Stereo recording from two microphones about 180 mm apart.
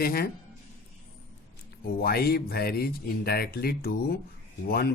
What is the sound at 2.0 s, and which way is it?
Speech, 55° left (ahead or behind).